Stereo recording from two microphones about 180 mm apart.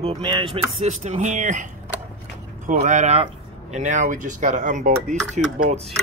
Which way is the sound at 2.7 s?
40° right (ahead or behind).